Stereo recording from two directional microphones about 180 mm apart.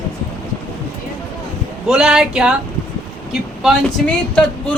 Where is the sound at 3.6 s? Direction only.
5° left (ahead or behind).